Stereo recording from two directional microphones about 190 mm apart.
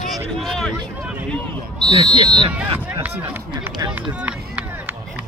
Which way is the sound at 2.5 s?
10° right (ahead or behind).